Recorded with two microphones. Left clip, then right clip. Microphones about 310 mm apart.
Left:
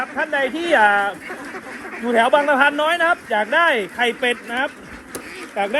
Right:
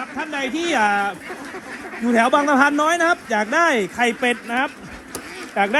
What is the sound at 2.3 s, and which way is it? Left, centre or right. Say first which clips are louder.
A man's voice: left 1 dB; right.